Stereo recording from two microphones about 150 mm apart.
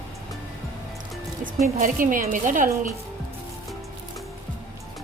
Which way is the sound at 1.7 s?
65° right (ahead or behind).